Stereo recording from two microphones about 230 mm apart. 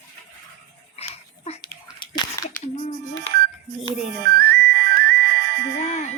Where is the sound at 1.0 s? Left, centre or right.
Left.